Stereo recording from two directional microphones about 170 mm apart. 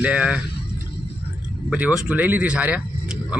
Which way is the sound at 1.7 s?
10° right (ahead or behind).